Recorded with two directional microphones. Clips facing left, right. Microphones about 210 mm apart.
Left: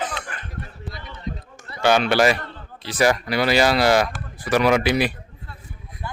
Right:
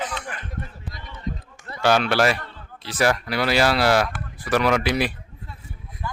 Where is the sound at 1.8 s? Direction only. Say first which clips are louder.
Left 2 dB; centre (ahead or behind).